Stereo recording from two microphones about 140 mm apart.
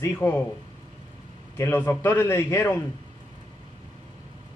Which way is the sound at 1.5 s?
15° left (ahead or behind).